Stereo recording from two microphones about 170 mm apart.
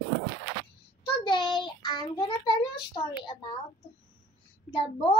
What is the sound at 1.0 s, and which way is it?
A child's voice, 30° left (ahead or behind).